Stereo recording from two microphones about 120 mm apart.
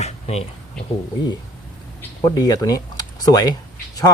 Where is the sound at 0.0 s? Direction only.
60° left (ahead or behind).